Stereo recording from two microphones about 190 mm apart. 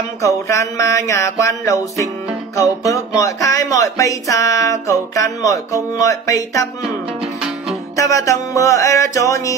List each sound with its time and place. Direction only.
0.2 s speech: 15° left (ahead or behind)
7.9 s speech: 15° left (ahead or behind)